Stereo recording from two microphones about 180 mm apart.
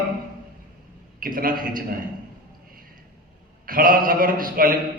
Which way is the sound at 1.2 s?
50° right (ahead or behind).